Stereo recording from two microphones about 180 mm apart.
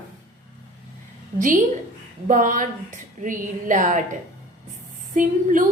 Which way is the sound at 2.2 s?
45° right (ahead or behind).